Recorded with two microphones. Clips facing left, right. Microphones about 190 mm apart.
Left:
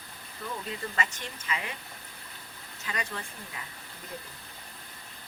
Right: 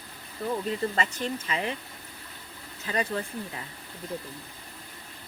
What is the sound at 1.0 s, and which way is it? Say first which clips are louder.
Speech: right 6 dB; 35° right (ahead or behind).